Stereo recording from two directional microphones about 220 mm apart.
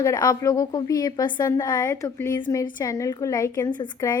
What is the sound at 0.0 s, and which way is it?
A woman's voice, 15° left (ahead or behind).